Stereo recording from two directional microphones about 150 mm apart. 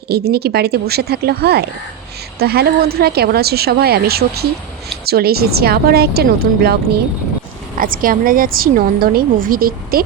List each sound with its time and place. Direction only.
0.1 s speech: 90° right
7.8 s a woman's voice: 70° right (ahead or behind)